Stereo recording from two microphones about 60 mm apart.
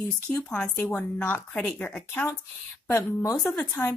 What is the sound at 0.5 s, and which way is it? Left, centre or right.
A woman's voice, left.